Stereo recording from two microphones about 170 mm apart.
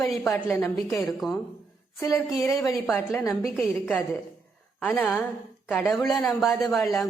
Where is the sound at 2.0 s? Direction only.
20° left (ahead or behind).